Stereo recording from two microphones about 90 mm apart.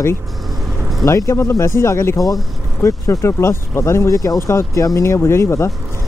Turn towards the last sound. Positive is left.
turn(degrees=30)  # may be behind; listen again after turning